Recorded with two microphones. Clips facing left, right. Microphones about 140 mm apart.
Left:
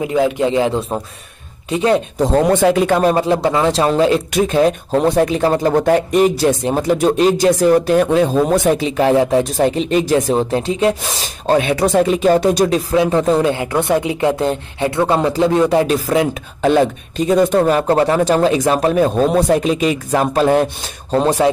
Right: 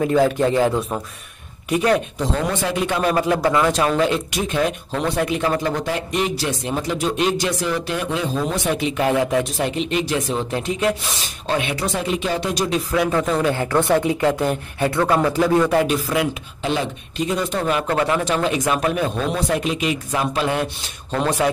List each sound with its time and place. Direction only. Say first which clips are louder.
0.0 s a man's voice: left 1 dB; 15° left (ahead or behind)
2.1 s speech: left 9 dB; 45° left (ahead or behind)
3.0 s a woman's voice: left 4 dB; 30° left (ahead or behind)
8.8 s speech: left 5 dB; 35° left (ahead or behind)
9.4 s speech: left 7 dB; 40° left (ahead or behind)
11.4 s speech: left 8 dB; 40° left (ahead or behind)
11.7 s speech: left 9 dB; 55° left (ahead or behind)
12.9 s a woman's voice: left 4 dB; 25° left (ahead or behind)
15.9 s speech: left 5 dB; 35° left (ahead or behind)